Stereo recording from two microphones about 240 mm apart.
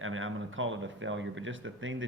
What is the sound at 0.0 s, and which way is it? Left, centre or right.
Speech, right.